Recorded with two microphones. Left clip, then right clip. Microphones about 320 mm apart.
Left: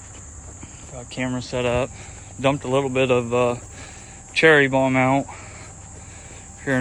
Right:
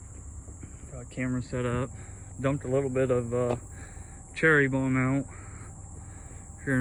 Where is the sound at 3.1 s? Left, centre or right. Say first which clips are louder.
Left 8 dB; left.